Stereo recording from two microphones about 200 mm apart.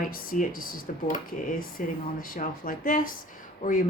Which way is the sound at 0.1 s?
45° left (ahead or behind).